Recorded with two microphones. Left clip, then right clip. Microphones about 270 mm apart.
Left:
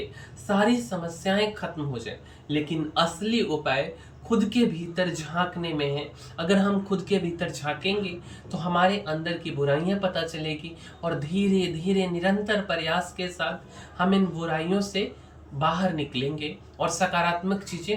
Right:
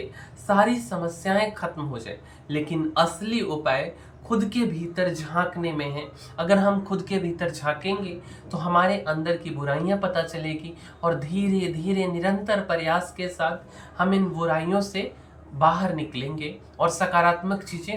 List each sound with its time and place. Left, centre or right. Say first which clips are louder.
0.4 s speech: right 3 dB; centre